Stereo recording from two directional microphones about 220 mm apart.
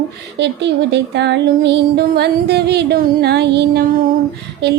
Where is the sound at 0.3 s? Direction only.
50° right (ahead or behind).